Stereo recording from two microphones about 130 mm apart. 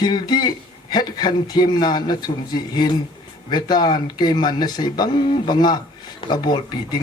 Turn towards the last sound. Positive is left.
turn(degrees=30)  # may be behind; listen again after turning